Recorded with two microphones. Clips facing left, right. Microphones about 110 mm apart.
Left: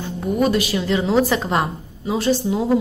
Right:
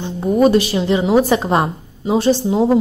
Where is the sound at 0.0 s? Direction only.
30° right (ahead or behind).